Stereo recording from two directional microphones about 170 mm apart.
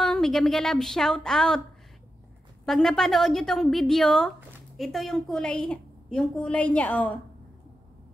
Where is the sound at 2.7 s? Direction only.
5° left (ahead or behind).